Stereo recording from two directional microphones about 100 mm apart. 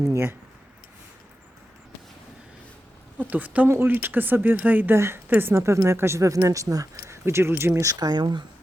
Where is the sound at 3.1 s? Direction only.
15° right (ahead or behind); by 8.4 s 50° right (ahead or behind).